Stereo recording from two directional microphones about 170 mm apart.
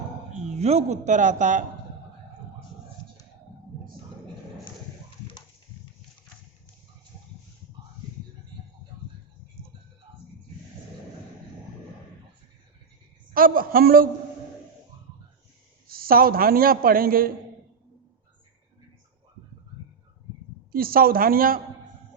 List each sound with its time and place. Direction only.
0.3 s speech: 40° right (ahead or behind)
13.3 s a sound: 55° right (ahead or behind)
15.9 s a man's voice: 60° right (ahead or behind)
20.7 s a man's voice: 60° right (ahead or behind)